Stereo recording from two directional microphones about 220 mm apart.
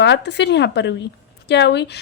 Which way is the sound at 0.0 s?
50° left (ahead or behind).